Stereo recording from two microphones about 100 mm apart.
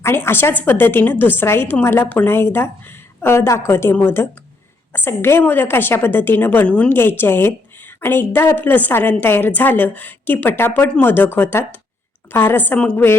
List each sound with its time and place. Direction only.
0.0 s a woman's voice: 25° left (ahead or behind)